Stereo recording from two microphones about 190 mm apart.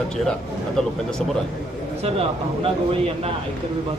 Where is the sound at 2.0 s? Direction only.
30° right (ahead or behind).